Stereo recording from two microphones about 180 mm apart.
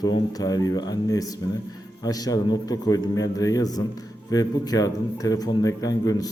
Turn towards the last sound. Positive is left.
turn(degrees=20)  # may be behind; listen again after turning